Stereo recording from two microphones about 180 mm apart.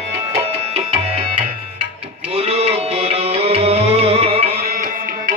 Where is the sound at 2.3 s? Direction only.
35° right (ahead or behind).